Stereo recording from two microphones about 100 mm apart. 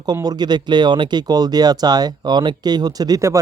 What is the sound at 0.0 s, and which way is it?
Speech, 40° right (ahead or behind).